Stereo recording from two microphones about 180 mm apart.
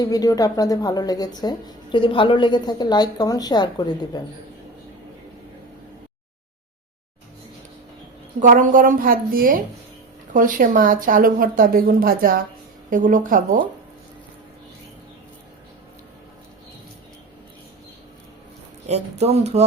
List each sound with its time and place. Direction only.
0.0 s a woman's voice: 20° left (ahead or behind)
8.4 s speech: 50° right (ahead or behind)
18.9 s speech: 35° right (ahead or behind)